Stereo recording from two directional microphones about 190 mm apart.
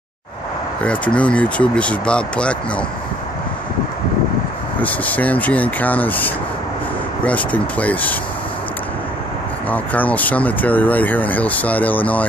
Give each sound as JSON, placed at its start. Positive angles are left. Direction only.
{"t": 0.8, "sound": "speech", "side_deg": 5}
{"t": 4.7, "sound": "speech", "side_deg": 10}
{"t": 9.7, "sound": "speech", "side_deg": 10}